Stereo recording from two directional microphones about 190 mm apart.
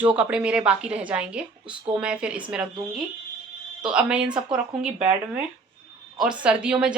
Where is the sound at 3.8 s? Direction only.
5° right (ahead or behind).